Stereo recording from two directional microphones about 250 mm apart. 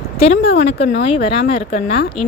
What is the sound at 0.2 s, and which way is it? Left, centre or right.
Speech, left.